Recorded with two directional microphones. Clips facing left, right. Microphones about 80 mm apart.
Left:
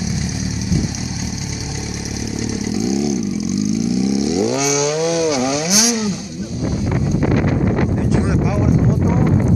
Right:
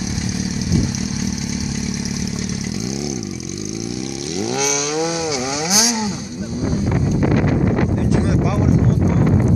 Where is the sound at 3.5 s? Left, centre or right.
Right.